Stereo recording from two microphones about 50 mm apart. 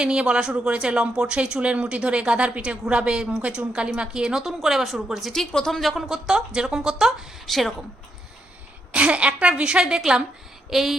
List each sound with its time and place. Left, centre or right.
0.0 s a woman's voice: centre
5.5 s speech: centre
5.9 s a woman's voice: centre
7.4 s speech: centre
8.9 s a woman's voice: right
10.7 s a sound: centre